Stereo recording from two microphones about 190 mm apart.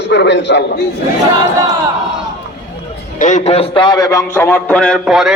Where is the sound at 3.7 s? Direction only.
25° left (ahead or behind); by 5.3 s 5° right (ahead or behind).